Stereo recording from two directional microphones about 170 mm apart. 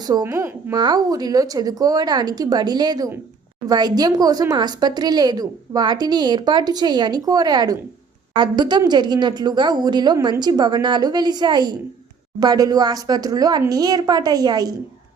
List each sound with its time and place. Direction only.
0.1 s speech: 20° right (ahead or behind)